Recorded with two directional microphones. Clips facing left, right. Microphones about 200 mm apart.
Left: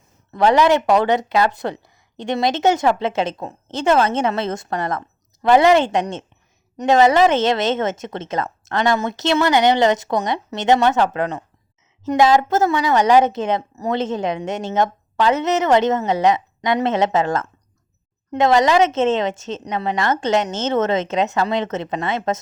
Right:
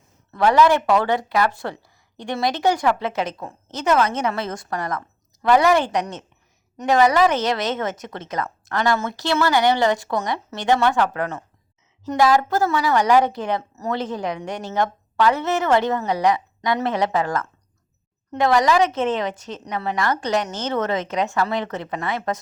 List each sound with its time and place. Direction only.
0.3 s speech: 20° left (ahead or behind)